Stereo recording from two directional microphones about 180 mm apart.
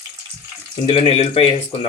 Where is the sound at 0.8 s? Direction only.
30° left (ahead or behind).